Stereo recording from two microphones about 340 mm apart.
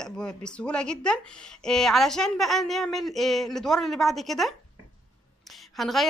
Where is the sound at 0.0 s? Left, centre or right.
Centre.